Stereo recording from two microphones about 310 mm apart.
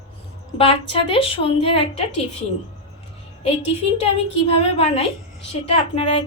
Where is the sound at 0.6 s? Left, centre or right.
Centre.